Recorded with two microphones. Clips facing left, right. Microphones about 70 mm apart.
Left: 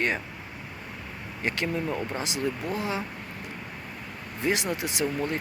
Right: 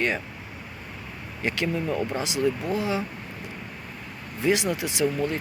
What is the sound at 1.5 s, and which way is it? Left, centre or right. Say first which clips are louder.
Speech: right 2 dB; left.